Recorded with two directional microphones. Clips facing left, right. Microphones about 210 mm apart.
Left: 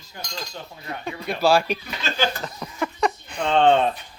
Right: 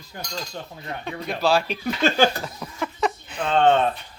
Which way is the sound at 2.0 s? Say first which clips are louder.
Right 6 dB; 45° right (ahead or behind).